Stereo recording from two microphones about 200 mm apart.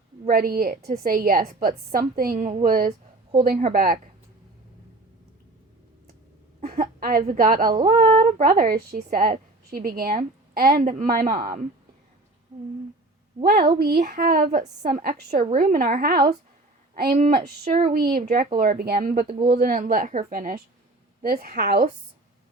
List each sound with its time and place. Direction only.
0.3 s a woman's voice: 45° right (ahead or behind)
6.6 s a woman's voice: 45° right (ahead or behind)
13.4 s a woman's voice: 45° right (ahead or behind); by 15.7 s 30° right (ahead or behind)
15.7 s a woman's voice: 45° right (ahead or behind)